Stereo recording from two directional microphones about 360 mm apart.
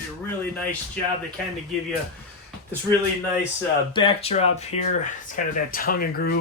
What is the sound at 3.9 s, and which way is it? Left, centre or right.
Speech, centre.